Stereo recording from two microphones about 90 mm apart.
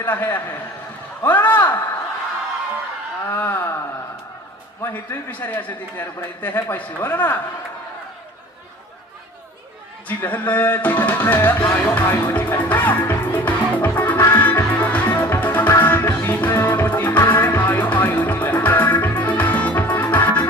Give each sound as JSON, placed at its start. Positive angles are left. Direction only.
{"t": 0.0, "sound": "a man's voice", "side_deg": 20}
{"t": 3.3, "sound": "wail", "side_deg": 25}
{"t": 4.8, "sound": "a man's voice", "side_deg": 20}
{"t": 10.1, "sound": "a man's voice", "side_deg": 20}
{"t": 14.0, "sound": "music", "side_deg": 20}